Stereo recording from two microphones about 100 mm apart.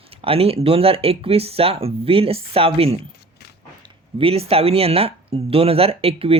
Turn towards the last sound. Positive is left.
turn(degrees=-75)  # may be behind; listen again after turning